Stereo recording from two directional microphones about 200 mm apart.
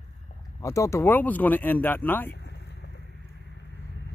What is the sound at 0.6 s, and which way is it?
Speech, 15° left (ahead or behind).